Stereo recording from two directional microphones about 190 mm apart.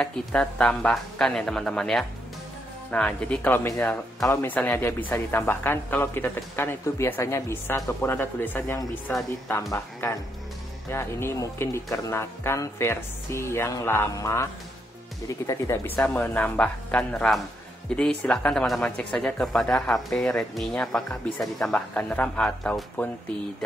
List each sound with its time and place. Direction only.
0.0 s speech: 5° left (ahead or behind)
16.0 s speech: 5° left (ahead or behind)